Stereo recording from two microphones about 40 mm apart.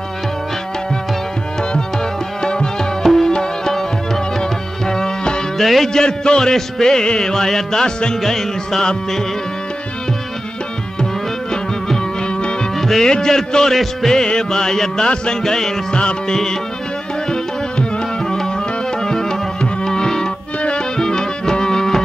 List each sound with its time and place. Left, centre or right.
2.4 s music: centre
5.6 s music: centre
6.0 s music: centre
11.5 s music: centre
12.7 s music: centre
16.0 s music: left
17.3 s tabla: left
18.2 s music: centre